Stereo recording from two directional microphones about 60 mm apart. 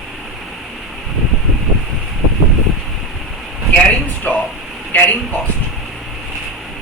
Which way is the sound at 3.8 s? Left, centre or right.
Left.